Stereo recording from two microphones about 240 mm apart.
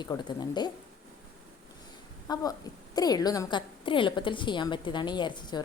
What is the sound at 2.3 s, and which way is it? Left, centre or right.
A woman's voice, centre.